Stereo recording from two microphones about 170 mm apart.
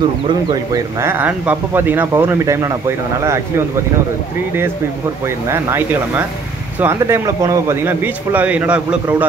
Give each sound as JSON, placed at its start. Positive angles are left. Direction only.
{"t": 1.0, "sound": "a man's voice", "side_deg": -10}
{"t": 5.5, "sound": "a man's voice", "side_deg": -15}